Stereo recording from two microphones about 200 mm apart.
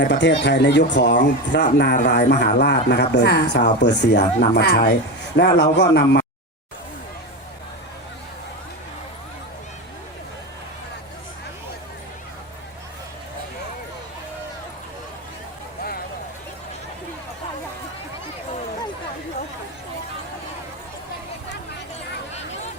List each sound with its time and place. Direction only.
0.0 s speech: 60° left (ahead or behind)